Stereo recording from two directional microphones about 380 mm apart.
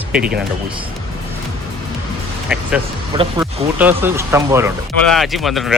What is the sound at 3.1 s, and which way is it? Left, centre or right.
A man's voice, centre.